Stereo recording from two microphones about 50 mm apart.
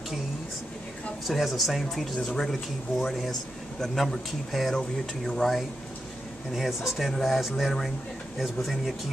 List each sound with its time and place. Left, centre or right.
1.2 s speech: centre
4.7 s speech: centre
5.4 s speech: centre